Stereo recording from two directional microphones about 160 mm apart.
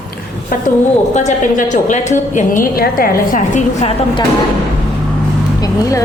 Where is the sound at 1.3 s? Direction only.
50° left (ahead or behind).